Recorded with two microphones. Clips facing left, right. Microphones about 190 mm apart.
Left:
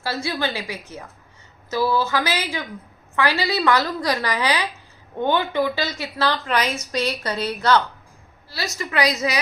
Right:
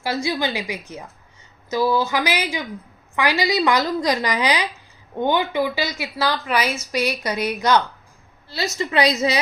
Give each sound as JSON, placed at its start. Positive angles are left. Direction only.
{"t": 0.0, "sound": "a woman's voice", "side_deg": -15}